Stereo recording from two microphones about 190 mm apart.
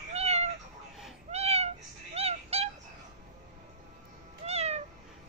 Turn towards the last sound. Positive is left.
turn(degrees=-35)  # may be behind; listen again after turning